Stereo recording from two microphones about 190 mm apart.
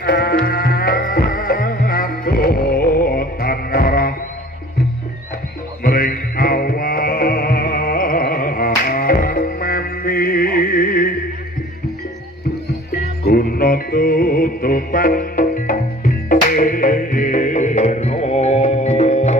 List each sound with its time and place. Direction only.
0.0 s music: 50° left (ahead or behind)
5.9 s music: 50° left (ahead or behind)
13.2 s music: 55° left (ahead or behind); by 19.3 s 35° left (ahead or behind)